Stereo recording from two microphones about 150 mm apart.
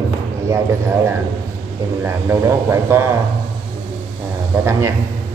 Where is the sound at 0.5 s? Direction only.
15° right (ahead or behind).